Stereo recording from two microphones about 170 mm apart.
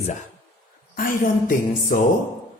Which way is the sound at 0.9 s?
55° left (ahead or behind).